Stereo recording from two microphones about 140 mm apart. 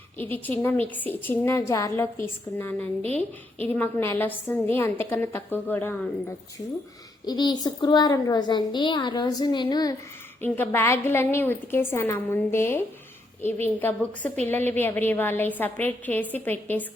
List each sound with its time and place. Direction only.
0.2 s a woman's voice: 10° left (ahead or behind)
7.3 s a child's voice: 30° left (ahead or behind)
10.4 s a woman's voice: 15° left (ahead or behind)